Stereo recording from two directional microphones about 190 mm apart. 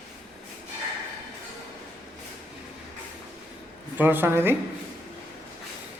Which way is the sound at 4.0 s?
10° right (ahead or behind).